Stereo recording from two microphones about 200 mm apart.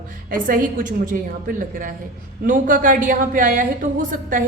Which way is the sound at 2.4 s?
40° right (ahead or behind).